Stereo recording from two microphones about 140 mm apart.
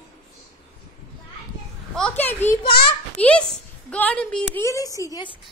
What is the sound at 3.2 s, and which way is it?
A woman's voice, 10° left (ahead or behind).